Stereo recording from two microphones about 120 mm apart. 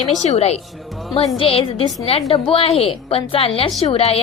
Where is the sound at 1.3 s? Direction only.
50° left (ahead or behind).